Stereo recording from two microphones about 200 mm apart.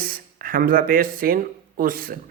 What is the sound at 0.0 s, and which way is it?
Speech, 45° right (ahead or behind).